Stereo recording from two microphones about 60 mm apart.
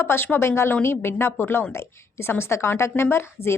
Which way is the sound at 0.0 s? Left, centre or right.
Left.